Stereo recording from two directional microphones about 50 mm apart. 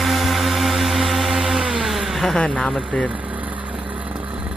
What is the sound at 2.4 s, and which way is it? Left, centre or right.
Speech, centre.